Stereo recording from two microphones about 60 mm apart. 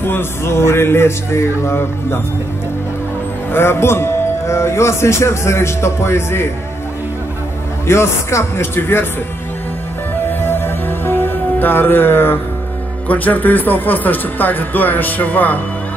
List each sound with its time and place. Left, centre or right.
0.0 s a man's voice: left
3.5 s a man's voice: left
7.8 s a man's voice: left
10.4 s music: left
13.1 s speech: left